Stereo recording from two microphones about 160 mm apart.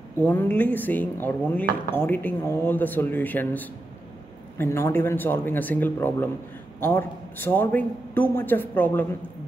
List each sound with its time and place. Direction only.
0.2 s speech: 10° left (ahead or behind)